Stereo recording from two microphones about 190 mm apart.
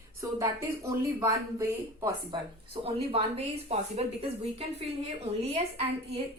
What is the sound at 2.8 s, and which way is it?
A woman's voice, 30° right (ahead or behind).